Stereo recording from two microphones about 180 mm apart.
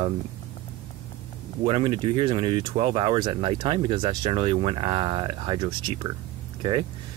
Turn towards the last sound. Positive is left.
turn(degrees=-25)  # may be behind; listen again after turning